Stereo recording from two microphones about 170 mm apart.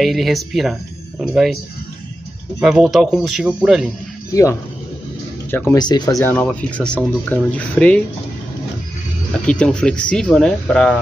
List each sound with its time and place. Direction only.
0.0 s speech: centre (ahead or behind)
2.6 s speech: centre (ahead or behind)
4.3 s speech: 20° left (ahead or behind)
9.5 s speech: 5° left (ahead or behind)